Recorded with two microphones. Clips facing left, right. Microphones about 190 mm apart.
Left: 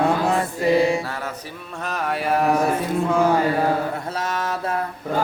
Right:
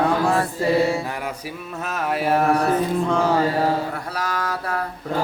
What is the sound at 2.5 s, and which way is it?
Mantra, 10° left (ahead or behind).